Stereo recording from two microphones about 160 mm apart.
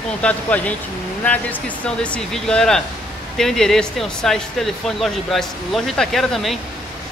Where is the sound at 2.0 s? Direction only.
5° left (ahead or behind).